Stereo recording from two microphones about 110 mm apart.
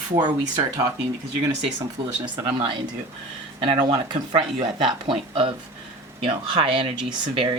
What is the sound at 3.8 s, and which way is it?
Speech, 45° right (ahead or behind).